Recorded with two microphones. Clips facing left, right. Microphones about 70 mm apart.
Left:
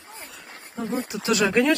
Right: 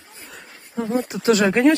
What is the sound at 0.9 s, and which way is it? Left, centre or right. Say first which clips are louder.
Speech: right 6 dB; right.